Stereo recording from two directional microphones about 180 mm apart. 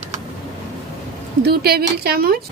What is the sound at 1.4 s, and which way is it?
Speech, 60° right (ahead or behind).